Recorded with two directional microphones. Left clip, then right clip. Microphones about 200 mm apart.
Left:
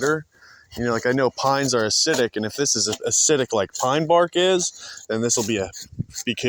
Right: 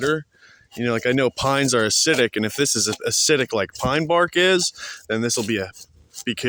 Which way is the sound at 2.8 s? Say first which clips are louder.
Even; 25° right (ahead or behind).